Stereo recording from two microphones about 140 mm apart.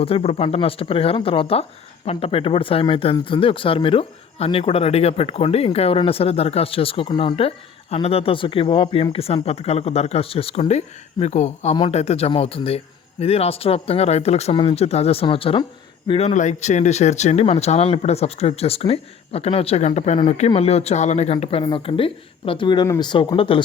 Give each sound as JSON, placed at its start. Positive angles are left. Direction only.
{"t": 0.0, "sound": "speech", "side_deg": 45}
{"t": 10.6, "sound": "a man's voice", "side_deg": 55}